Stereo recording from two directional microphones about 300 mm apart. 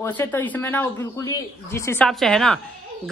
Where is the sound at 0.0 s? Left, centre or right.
Centre.